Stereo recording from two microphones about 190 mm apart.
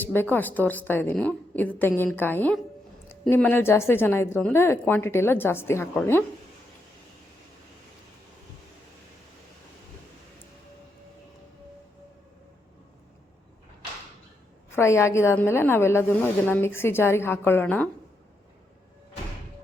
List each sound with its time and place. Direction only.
0.0 s speech: 10° left (ahead or behind)
14.8 s speech: 15° left (ahead or behind)